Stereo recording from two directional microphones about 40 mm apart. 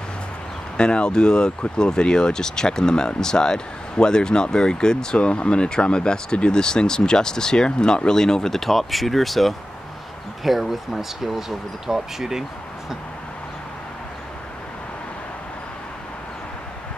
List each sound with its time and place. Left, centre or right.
0.7 s speech: left; by 12.4 s centre